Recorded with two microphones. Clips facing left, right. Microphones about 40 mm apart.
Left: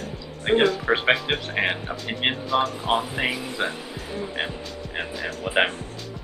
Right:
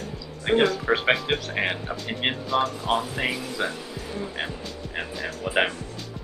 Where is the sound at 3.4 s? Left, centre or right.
Left.